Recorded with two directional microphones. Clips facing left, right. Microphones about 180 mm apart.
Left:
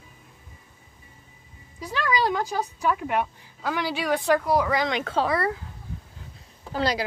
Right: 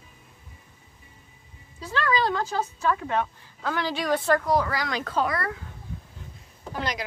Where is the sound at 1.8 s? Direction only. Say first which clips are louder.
Even; 15° left (ahead or behind).